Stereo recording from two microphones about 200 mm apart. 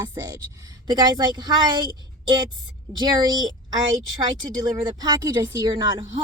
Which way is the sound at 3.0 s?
20° right (ahead or behind).